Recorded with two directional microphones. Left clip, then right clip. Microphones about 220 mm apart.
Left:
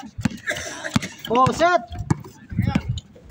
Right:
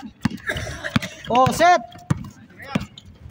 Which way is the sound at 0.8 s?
15° right (ahead or behind).